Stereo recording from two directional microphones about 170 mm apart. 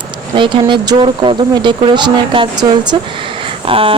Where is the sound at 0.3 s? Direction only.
30° right (ahead or behind).